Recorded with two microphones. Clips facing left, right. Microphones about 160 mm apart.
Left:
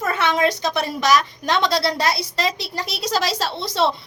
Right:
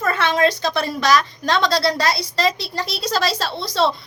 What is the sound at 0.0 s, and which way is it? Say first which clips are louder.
A woman's voice: right 2 dB; 15° left (ahead or behind).